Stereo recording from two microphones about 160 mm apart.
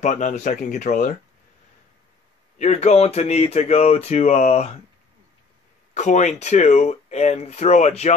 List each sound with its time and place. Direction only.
0.0 s speech: 50° left (ahead or behind)
2.6 s speech: 45° left (ahead or behind)
5.9 s speech: 45° left (ahead or behind)